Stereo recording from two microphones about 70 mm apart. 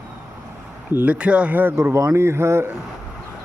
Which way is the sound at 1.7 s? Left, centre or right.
Right.